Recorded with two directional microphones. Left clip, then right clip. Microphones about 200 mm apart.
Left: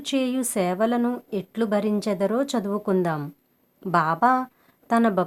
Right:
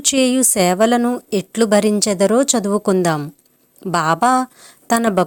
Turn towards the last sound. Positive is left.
turn(degrees=-30)  # may be behind; listen again after turning